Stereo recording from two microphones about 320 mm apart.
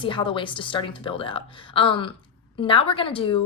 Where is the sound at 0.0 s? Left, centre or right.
Centre.